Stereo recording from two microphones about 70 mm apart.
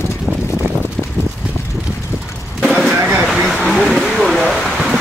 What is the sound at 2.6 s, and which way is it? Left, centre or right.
Vehicle, centre.